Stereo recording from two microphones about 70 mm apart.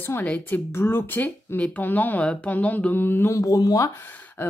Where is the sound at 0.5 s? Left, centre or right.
Left.